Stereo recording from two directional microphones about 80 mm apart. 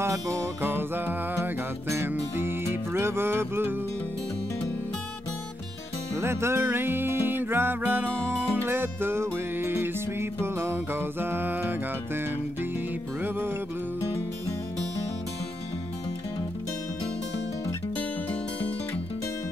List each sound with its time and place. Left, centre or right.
0.0 s music: right
0.6 s music: right
6.1 s music: right